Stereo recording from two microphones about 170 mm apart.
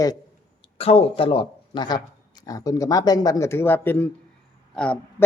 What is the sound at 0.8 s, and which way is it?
A man's voice, 35° left (ahead or behind).